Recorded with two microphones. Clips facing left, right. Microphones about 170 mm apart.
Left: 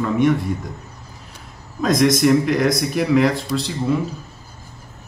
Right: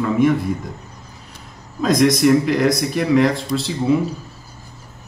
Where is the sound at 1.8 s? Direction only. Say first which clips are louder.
Right 1 dB; centre (ahead or behind).